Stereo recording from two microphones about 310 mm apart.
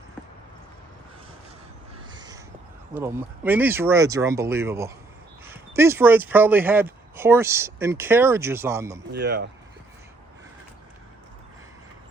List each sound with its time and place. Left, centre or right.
2.0 s crow: centre
2.9 s speech: centre
9.1 s speech: right